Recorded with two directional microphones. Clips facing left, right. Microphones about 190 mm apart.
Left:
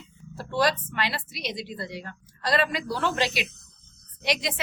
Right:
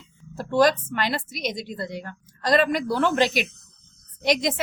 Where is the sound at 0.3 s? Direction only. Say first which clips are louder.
Right 6 dB; 45° right (ahead or behind).